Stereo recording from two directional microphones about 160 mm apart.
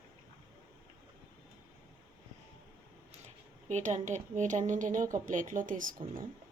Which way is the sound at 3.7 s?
45° right (ahead or behind).